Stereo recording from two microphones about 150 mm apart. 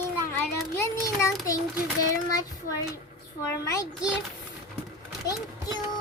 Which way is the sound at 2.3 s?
20° left (ahead or behind).